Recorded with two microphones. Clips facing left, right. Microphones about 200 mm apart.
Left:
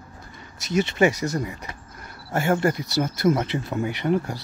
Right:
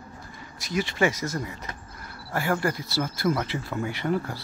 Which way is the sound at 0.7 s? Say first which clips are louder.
Left 5 dB; 25° left (ahead or behind).